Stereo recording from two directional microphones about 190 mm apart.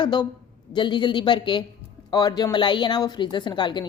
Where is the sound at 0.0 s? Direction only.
25° left (ahead or behind).